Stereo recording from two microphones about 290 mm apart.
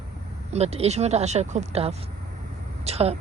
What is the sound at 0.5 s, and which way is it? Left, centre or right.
A woman's voice, right.